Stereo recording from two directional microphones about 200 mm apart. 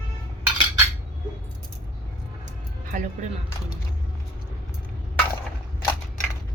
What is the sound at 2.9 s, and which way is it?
Speech, 45° right (ahead or behind).